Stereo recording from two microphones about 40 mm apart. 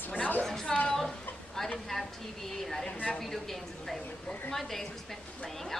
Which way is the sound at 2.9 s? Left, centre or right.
Left.